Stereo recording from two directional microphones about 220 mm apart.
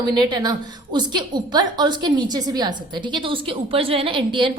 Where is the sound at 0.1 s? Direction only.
20° right (ahead or behind).